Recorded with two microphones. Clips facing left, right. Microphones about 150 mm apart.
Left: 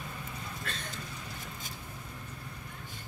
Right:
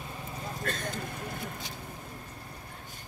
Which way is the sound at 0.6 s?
45° right (ahead or behind).